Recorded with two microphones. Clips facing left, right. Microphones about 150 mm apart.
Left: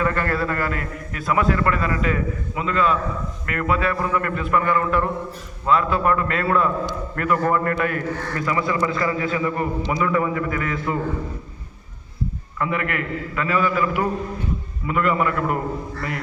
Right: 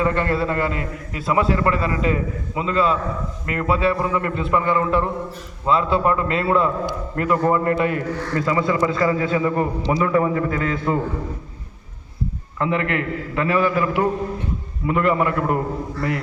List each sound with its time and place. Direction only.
0.0 s a man's voice: 25° right (ahead or behind)
12.5 s a man's voice: 25° right (ahead or behind)